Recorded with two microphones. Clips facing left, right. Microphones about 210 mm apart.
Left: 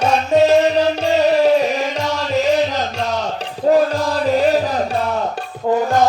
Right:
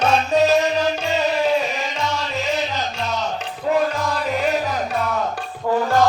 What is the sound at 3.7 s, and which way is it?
Music, 35° left (ahead or behind).